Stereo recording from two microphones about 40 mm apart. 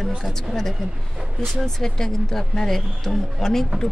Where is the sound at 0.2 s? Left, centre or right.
Centre.